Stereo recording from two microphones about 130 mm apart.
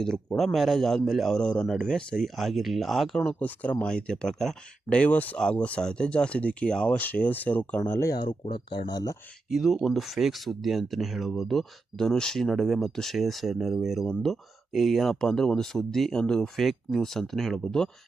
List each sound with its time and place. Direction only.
0.0 s a man's voice: 5° left (ahead or behind)
7.9 s speech: 25° left (ahead or behind)
9.5 s speech: centre (ahead or behind)